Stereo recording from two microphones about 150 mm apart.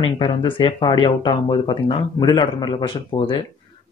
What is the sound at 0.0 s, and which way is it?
Speech, 35° left (ahead or behind).